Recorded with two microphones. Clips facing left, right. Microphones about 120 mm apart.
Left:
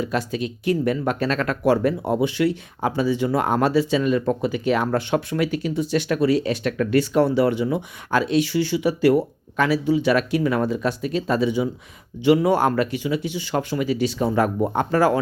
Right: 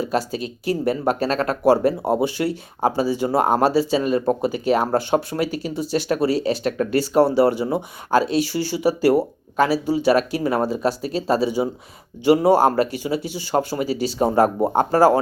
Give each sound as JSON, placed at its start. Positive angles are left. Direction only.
{"t": 0.0, "sound": "speech", "side_deg": -35}